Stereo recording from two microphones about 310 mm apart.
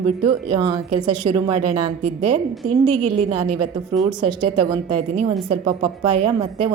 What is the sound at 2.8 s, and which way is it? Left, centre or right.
Speech, right.